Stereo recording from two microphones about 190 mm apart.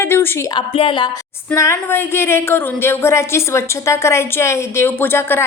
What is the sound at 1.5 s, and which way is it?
A woman's voice, 15° left (ahead or behind).